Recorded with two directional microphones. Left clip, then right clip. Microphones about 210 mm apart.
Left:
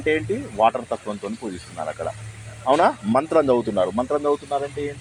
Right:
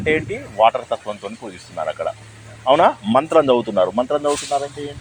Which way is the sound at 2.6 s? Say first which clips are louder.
Right 4 dB; 20° right (ahead or behind).